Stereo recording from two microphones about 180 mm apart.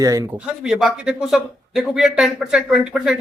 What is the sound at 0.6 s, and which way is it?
Speech, 5° right (ahead or behind).